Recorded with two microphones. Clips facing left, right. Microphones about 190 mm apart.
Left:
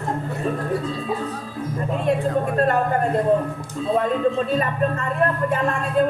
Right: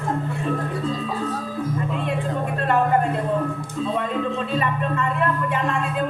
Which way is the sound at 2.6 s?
40° left (ahead or behind).